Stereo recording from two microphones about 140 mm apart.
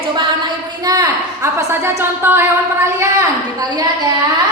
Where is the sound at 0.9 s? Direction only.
25° right (ahead or behind).